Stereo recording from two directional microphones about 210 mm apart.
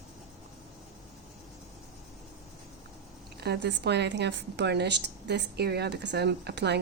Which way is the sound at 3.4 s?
55° right (ahead or behind).